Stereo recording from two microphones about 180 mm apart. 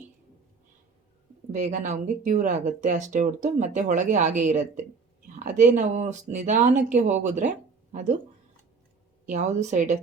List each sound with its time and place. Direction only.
1.5 s speech: 45° right (ahead or behind)
9.2 s speech: 45° right (ahead or behind)